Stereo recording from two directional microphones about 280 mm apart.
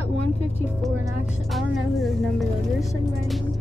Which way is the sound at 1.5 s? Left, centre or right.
Centre.